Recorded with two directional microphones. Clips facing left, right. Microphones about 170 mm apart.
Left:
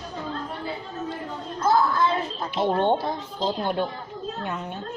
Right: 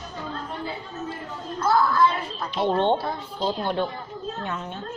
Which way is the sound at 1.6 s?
25° left (ahead or behind).